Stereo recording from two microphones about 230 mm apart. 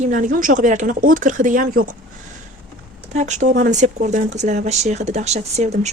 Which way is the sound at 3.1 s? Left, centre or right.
Right.